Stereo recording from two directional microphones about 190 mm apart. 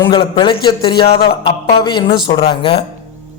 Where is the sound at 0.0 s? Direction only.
25° left (ahead or behind).